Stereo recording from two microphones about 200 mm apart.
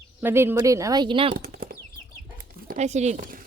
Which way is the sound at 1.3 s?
45° right (ahead or behind).